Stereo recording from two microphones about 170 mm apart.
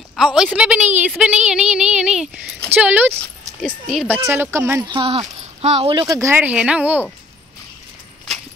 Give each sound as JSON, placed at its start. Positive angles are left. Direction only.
{"t": 0.1, "sound": "a woman's voice", "side_deg": -5}
{"t": 4.2, "sound": "speech", "side_deg": -15}
{"t": 4.8, "sound": "speech", "side_deg": -30}
{"t": 6.0, "sound": "speech", "side_deg": -15}